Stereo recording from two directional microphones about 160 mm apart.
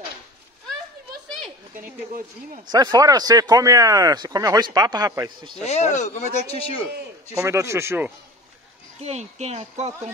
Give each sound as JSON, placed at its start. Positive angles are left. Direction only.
{"t": 2.1, "sound": "speech", "side_deg": -55}
{"t": 2.7, "sound": "speech", "side_deg": -25}
{"t": 5.6, "sound": "speech", "side_deg": 45}
{"t": 7.3, "sound": "a man's voice", "side_deg": -20}
{"t": 9.0, "sound": "speech", "side_deg": -45}